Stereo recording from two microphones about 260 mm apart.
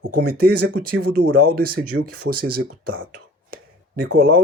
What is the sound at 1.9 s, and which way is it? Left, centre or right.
Speech, right.